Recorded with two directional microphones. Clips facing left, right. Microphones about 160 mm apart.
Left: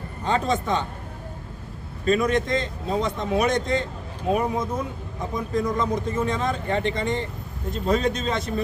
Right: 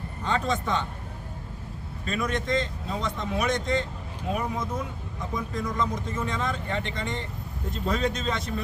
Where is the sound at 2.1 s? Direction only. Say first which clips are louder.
Left 7 dB; 40° left (ahead or behind).